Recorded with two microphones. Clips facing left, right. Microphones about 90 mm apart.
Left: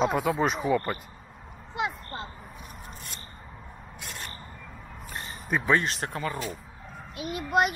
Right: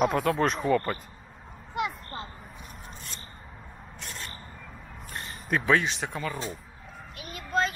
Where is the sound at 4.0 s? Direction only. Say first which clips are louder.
Even; 5° left (ahead or behind).